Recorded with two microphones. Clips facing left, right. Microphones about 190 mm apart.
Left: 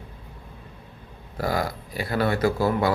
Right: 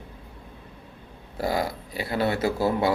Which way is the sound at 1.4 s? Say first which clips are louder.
Even; 25° right (ahead or behind).